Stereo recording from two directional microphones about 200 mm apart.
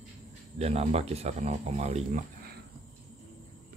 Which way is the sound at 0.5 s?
30° right (ahead or behind).